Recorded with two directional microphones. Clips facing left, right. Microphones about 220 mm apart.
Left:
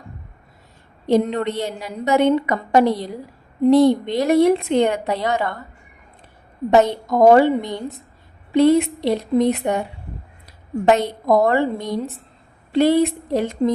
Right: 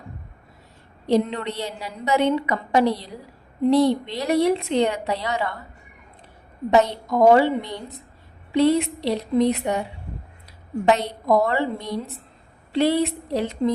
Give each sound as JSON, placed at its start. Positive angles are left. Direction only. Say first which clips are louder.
{"t": 1.0, "sound": "a woman's voice", "louder": "left 3 dB", "side_deg": 50}
{"t": 6.7, "sound": "a woman's voice", "louder": "left 3 dB", "side_deg": 50}
{"t": 10.8, "sound": "a woman's voice", "louder": "left 3 dB", "side_deg": 50}
{"t": 12.7, "sound": "a woman's voice", "louder": "left 4 dB", "side_deg": 50}